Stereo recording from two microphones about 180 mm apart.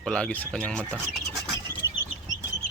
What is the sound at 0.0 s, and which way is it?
Speech, 5° left (ahead or behind).